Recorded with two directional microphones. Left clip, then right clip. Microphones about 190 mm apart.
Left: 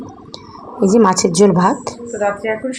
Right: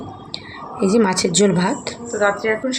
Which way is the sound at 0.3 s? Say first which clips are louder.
Right 5 dB; 15° left (ahead or behind).